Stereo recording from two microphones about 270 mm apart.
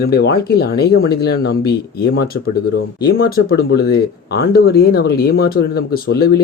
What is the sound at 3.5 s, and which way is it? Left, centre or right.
Speech, left.